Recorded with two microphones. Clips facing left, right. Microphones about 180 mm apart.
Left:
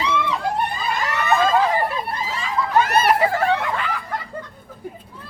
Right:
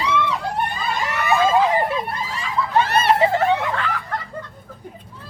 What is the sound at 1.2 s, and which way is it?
Vehicle, 10° right (ahead or behind).